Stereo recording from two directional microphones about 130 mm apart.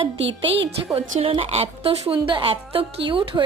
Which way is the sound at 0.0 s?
45° right (ahead or behind).